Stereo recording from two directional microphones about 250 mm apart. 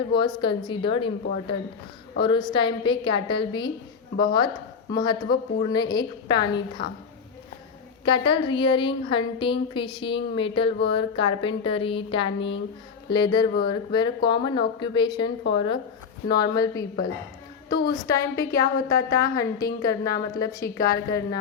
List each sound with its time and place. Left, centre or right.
0.2 s a woman's voice: centre
8.0 s a woman's voice: centre